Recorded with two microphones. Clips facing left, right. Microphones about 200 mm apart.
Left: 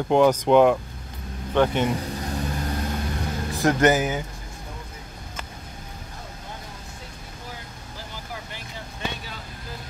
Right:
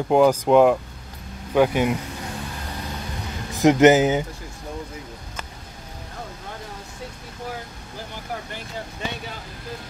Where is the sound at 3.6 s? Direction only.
20° right (ahead or behind).